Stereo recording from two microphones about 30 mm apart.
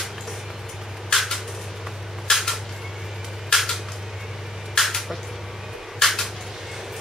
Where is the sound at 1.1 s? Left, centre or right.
Centre.